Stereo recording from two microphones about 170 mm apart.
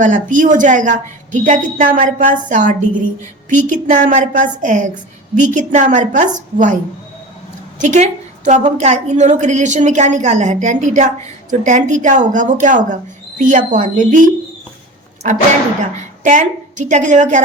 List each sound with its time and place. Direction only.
0.0 s a woman's voice: 50° right (ahead or behind)
7.8 s a woman's voice: 45° right (ahead or behind)
16.0 s a woman's voice: 45° right (ahead or behind)